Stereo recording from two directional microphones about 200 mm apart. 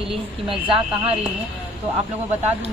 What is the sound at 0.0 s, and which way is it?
A woman's voice, 25° right (ahead or behind).